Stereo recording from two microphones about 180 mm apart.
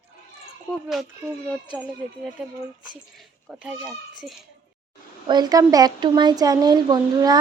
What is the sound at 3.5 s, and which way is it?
Speech, 10° right (ahead or behind).